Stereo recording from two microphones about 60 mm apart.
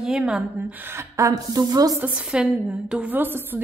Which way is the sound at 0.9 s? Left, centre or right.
Right.